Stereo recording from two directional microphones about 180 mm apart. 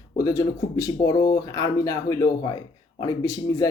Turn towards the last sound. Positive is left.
turn(degrees=20)  # may be behind; listen again after turning